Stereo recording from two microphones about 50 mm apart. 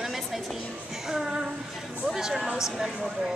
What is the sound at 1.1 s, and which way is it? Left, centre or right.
Speech, centre.